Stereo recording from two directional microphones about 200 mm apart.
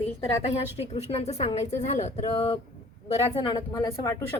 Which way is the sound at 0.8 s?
35° left (ahead or behind).